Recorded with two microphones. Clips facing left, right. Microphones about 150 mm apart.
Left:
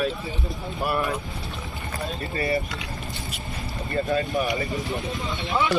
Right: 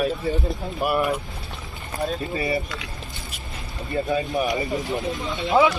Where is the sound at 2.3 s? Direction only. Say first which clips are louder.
Even; 20° right (ahead or behind).